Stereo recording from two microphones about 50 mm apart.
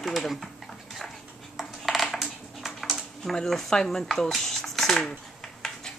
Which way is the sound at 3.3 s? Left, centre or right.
Centre.